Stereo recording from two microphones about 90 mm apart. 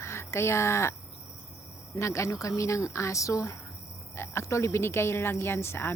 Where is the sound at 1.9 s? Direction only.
35° left (ahead or behind).